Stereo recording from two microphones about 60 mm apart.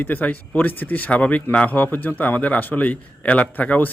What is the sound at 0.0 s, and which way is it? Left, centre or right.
Speech, left.